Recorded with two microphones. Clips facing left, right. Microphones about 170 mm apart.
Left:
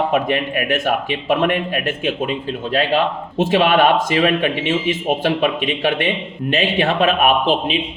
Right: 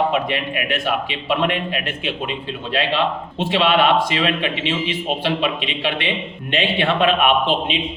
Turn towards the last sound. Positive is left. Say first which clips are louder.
# left 2 dB
turn(degrees=40)  # may be behind; listen again after turning